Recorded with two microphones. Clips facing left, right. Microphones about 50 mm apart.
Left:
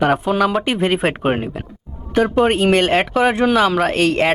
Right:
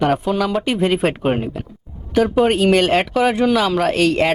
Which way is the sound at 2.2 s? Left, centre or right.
Centre.